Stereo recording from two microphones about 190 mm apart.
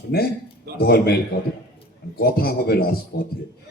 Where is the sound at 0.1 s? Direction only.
55° left (ahead or behind).